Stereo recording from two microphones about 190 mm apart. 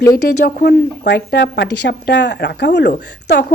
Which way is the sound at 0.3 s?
55° left (ahead or behind).